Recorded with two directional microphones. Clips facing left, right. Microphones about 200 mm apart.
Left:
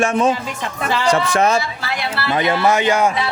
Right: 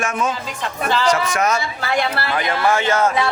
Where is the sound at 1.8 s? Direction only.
50° right (ahead or behind).